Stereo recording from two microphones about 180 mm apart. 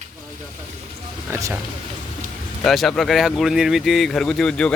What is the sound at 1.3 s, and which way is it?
Speech, 15° right (ahead or behind).